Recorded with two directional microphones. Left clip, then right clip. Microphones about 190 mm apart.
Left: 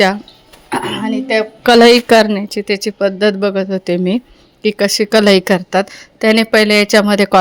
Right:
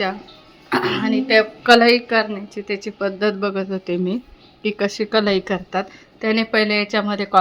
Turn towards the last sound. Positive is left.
turn(degrees=35)  # may be behind; listen again after turning